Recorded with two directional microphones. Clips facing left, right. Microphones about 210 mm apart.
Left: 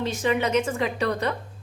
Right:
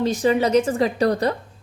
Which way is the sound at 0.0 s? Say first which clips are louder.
Right 5 dB; 35° right (ahead or behind).